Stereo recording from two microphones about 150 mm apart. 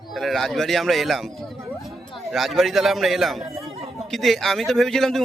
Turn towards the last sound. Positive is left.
turn(degrees=0)  # may be behind; listen again after turning